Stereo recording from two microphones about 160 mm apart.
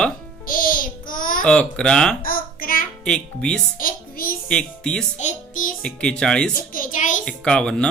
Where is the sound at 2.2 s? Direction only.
65° left (ahead or behind).